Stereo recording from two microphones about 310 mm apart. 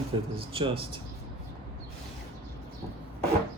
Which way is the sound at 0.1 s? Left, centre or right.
Centre.